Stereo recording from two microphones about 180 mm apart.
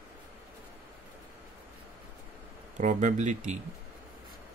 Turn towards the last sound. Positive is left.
turn(degrees=-40)  # may be behind; listen again after turning